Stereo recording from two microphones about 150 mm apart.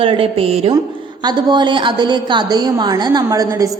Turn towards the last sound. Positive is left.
turn(degrees=-20)  # may be behind; listen again after turning